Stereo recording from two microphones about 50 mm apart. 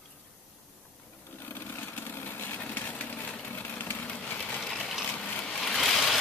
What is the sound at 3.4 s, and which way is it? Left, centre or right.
Engine, left.